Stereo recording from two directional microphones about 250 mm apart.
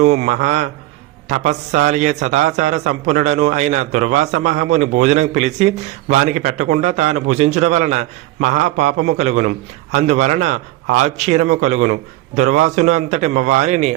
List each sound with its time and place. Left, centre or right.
0.0 s a man's voice: right